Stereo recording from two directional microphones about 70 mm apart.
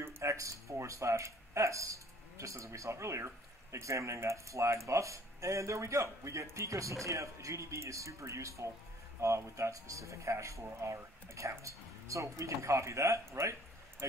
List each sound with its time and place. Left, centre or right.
0.0 s speech: right